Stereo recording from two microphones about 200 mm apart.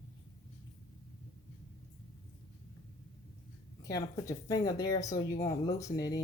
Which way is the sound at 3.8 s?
20° left (ahead or behind).